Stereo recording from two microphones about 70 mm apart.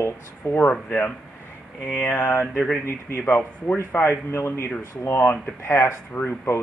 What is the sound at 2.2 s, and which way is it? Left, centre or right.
Mantra, left.